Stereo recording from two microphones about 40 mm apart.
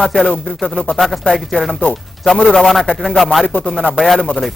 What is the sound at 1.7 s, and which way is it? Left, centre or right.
Speech, left.